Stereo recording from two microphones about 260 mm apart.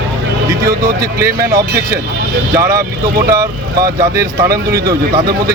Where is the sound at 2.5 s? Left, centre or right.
Centre.